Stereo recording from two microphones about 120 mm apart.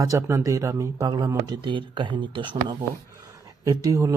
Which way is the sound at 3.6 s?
30° right (ahead or behind).